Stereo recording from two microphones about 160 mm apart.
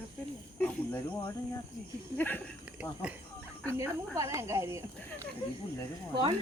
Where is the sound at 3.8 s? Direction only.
15° right (ahead or behind).